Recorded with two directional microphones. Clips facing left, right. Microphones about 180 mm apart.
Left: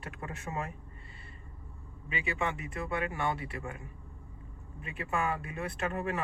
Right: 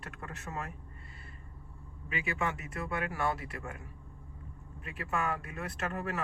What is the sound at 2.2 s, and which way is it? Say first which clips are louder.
Speech: left 1 dB; 50° right (ahead or behind).